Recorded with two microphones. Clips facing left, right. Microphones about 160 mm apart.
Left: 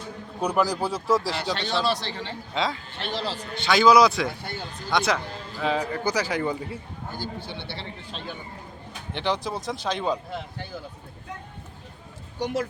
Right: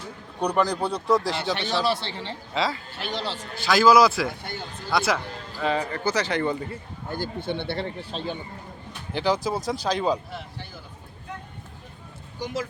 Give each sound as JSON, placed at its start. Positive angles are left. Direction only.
{"t": 0.3, "sound": "speech", "side_deg": 5}
{"t": 1.7, "sound": "a man's voice", "side_deg": -20}
{"t": 2.5, "sound": "speech", "side_deg": 0}
{"t": 7.1, "sound": "speech", "side_deg": -55}
{"t": 8.1, "sound": "speech", "side_deg": -35}
{"t": 9.1, "sound": "speech", "side_deg": 0}
{"t": 12.4, "sound": "speech", "side_deg": 70}